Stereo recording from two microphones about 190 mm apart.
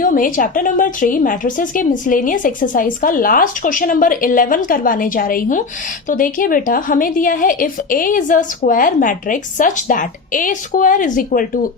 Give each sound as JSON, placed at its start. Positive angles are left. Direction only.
{"t": 0.0, "sound": "a woman's voice", "side_deg": 45}